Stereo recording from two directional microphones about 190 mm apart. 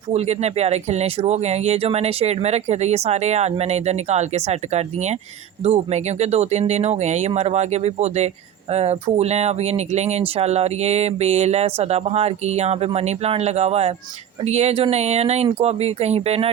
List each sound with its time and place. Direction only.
0.1 s speech: 35° right (ahead or behind)